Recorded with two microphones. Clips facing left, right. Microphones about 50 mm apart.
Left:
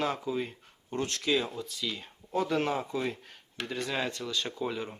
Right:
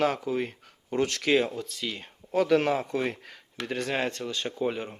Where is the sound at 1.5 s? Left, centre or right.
Right.